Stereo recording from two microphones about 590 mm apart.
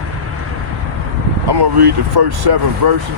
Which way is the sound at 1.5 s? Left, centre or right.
Right.